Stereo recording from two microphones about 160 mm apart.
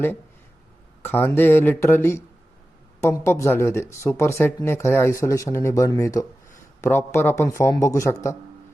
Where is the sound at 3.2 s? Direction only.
15° left (ahead or behind).